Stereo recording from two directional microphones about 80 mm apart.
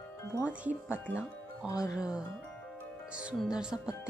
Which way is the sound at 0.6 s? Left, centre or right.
Centre.